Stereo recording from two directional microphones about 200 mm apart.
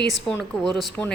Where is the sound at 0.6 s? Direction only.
5° left (ahead or behind).